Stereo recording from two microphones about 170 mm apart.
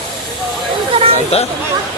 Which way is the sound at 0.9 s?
35° right (ahead or behind).